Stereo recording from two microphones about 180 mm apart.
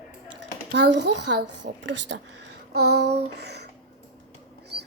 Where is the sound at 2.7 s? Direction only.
65° right (ahead or behind).